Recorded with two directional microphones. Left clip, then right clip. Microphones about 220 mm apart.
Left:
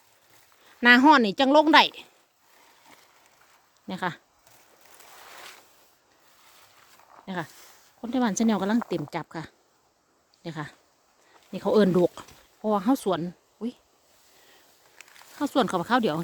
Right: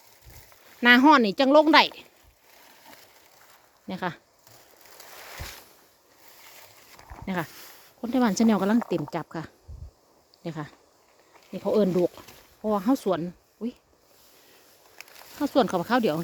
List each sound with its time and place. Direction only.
0.8 s a woman's voice: centre (ahead or behind)
3.8 s a woman's voice: centre (ahead or behind)
7.3 s a woman's voice: 10° right (ahead or behind)
11.5 s speech: 10° left (ahead or behind)
12.2 s a sound: 15° left (ahead or behind)
12.6 s speech: centre (ahead or behind)
15.4 s a woman's voice: centre (ahead or behind)